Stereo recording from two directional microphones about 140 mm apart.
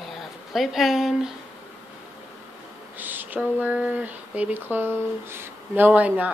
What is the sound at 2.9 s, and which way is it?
Speech, 15° right (ahead or behind).